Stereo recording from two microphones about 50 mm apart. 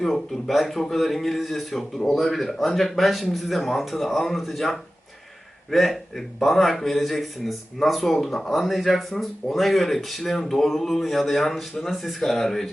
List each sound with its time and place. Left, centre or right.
0.0 s speech: centre